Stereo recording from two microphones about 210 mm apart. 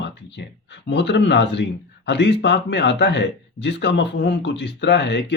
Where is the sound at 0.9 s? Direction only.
55° left (ahead or behind).